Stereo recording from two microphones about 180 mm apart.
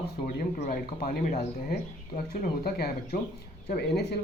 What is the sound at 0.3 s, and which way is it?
Speech, 55° left (ahead or behind).